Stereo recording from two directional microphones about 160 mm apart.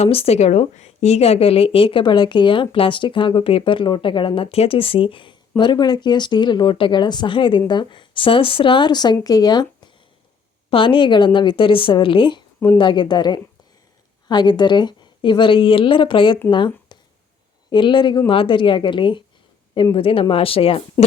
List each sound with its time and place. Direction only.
0.0 s a woman's voice: 40° left (ahead or behind)